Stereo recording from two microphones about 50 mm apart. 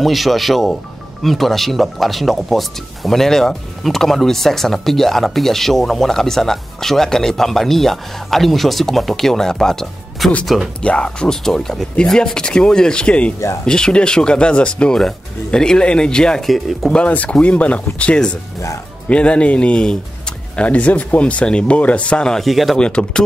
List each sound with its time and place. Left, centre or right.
0.0 s speech: centre
10.8 s speech: left
11.2 s speech: centre
15.0 s speech: centre
16.4 s speech: centre
16.9 s speech: left
22.5 s speech: centre
22.8 s speech: centre